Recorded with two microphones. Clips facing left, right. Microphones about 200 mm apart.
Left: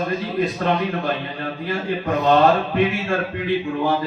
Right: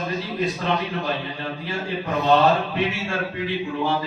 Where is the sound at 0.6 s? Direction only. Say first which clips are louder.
Left 4 dB; 50° left (ahead or behind).